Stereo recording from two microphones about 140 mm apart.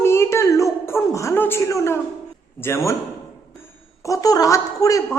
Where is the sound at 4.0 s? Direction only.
25° left (ahead or behind).